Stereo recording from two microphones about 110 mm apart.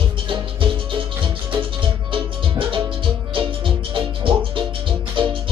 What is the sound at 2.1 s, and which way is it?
Music, 50° right (ahead or behind).